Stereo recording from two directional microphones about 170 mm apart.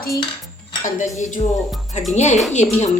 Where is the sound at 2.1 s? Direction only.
45° left (ahead or behind).